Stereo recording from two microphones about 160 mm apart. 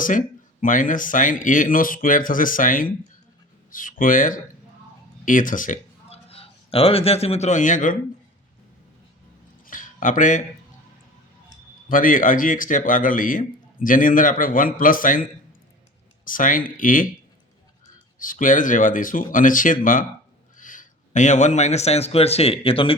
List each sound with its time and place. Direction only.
0.0 s speech: 55° left (ahead or behind)
6.1 s a man's voice: 35° left (ahead or behind); by 7.9 s 55° left (ahead or behind)
9.6 s a sound: 55° left (ahead or behind)
11.9 s speech: 60° left (ahead or behind)
16.2 s speech: 60° left (ahead or behind)
18.2 s a man's voice: 55° left (ahead or behind); by 23.0 s 35° left (ahead or behind)